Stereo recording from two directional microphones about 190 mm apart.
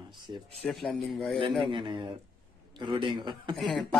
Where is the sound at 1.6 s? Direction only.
25° right (ahead or behind).